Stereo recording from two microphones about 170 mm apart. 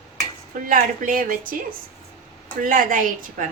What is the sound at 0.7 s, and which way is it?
Speech, 50° right (ahead or behind).